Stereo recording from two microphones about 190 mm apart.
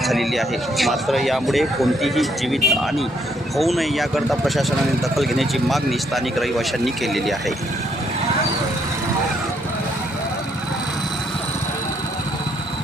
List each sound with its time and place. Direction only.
0.0 s speech: centre (ahead or behind)